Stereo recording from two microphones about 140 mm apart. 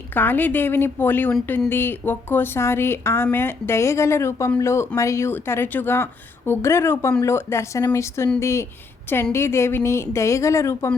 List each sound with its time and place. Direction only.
0.1 s a woman's voice: 15° left (ahead or behind)